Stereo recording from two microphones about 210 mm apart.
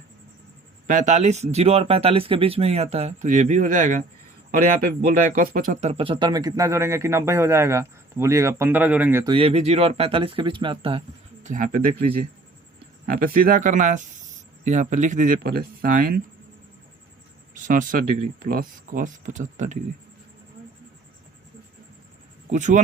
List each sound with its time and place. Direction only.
0.9 s speech: 35° right (ahead or behind)
5.4 s speech: 45° right (ahead or behind); by 9.2 s 10° right (ahead or behind)
9.2 s speech: 25° right (ahead or behind)
11.4 s speech: 40° right (ahead or behind)
13.1 s speech: 45° right (ahead or behind)
17.5 s speech: 40° right (ahead or behind)
22.5 s speech: 35° right (ahead or behind)